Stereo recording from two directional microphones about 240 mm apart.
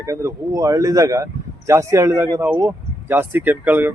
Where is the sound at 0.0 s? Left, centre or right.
Centre.